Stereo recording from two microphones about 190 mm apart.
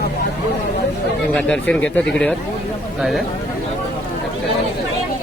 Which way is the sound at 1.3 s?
5° left (ahead or behind).